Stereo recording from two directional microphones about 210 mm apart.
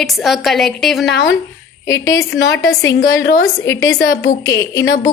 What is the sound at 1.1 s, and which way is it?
Speech, 55° left (ahead or behind).